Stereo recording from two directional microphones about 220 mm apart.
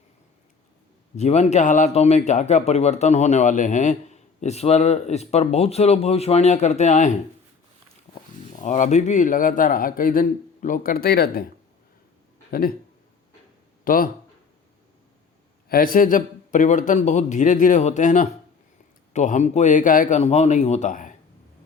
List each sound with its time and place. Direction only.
1.1 s a man's voice: 30° left (ahead or behind)
8.6 s a man's voice: 35° left (ahead or behind)
12.5 s speech: 40° left (ahead or behind)
13.8 s speech: 40° left (ahead or behind)
15.7 s a man's voice: 40° left (ahead or behind)